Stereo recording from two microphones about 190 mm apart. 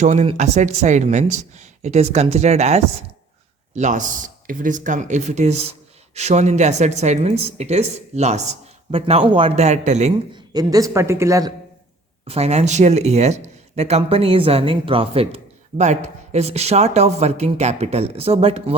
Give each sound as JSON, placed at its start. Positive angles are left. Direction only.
{"t": 0.0, "sound": "speech", "side_deg": -35}
{"t": 10.3, "sound": "a man's voice", "side_deg": -20}
{"t": 12.3, "sound": "speech", "side_deg": -35}